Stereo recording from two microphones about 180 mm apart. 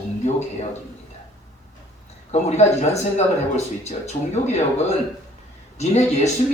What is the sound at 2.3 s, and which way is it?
Speech, 40° left (ahead or behind).